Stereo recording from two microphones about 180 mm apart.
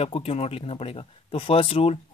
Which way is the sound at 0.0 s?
35° left (ahead or behind).